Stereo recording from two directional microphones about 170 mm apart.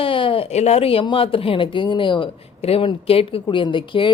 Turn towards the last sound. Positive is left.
turn(degrees=30)  # may be behind; listen again after turning